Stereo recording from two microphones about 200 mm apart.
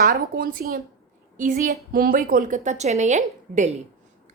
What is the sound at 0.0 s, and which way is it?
A woman's voice, 45° right (ahead or behind).